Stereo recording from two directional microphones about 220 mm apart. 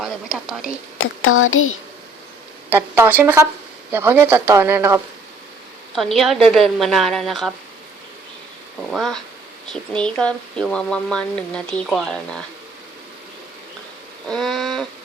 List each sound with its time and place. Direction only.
0.0 s speech: centre (ahead or behind)
0.9 s a child's voice: 65° left (ahead or behind)
2.6 s speech: 10° right (ahead or behind)
5.9 s speech: centre (ahead or behind)
8.9 s speech: centre (ahead or behind)
14.3 s a sound: centre (ahead or behind)